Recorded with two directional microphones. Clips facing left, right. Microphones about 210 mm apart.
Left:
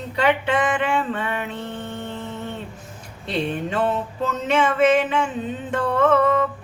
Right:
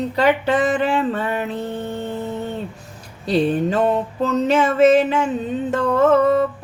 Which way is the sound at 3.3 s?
35° right (ahead or behind).